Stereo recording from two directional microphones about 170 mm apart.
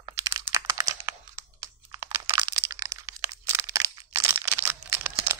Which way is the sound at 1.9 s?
20° right (ahead or behind).